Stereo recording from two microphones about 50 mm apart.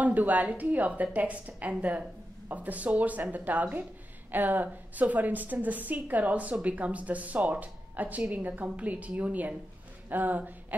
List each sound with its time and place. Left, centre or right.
0.0 s a woman's voice: right